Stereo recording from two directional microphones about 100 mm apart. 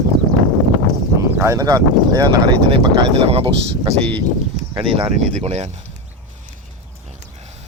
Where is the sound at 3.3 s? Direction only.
80° right.